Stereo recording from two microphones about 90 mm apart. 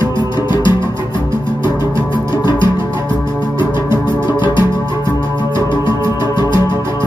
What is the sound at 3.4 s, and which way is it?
Music, 55° left (ahead or behind).